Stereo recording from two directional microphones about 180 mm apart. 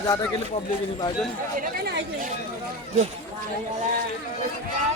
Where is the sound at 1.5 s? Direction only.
60° right (ahead or behind).